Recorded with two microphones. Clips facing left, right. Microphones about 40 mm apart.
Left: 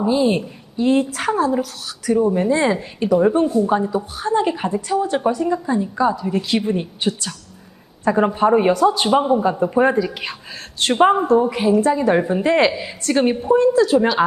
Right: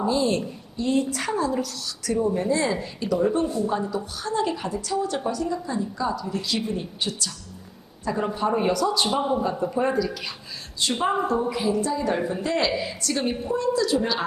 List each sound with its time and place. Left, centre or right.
0.0 s a woman's voice: left
0.9 s a woman's voice: left
1.5 s a woman's voice: left
9.3 s a man's voice: left
9.6 s a woman's voice: left
10.8 s a woman's voice: left
11.1 s a woman's voice: left
11.5 s a woman's voice: left
11.8 s a woman's voice: left